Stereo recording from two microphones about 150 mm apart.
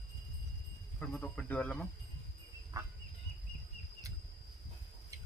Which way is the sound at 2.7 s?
25° right (ahead or behind).